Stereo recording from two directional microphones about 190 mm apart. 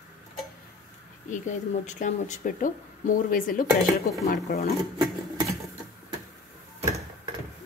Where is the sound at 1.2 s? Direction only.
40° left (ahead or behind).